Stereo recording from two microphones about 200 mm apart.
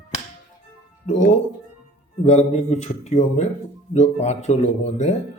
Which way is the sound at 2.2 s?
35° left (ahead or behind).